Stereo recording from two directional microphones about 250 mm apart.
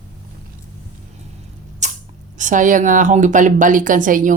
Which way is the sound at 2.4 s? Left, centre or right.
Right.